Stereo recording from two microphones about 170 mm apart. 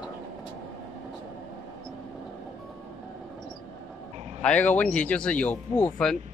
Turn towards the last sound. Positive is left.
turn(degrees=5)  # may be behind; listen again after turning